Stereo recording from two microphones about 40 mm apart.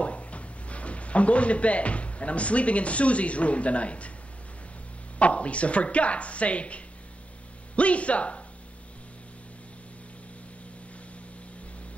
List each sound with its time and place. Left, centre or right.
0.0 s speech: left
5.2 s speech: left